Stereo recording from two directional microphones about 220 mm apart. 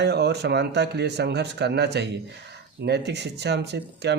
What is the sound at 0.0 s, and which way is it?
Speech, 50° right (ahead or behind).